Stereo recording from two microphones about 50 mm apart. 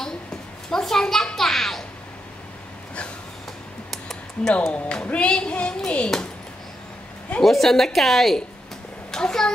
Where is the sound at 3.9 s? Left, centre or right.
Centre.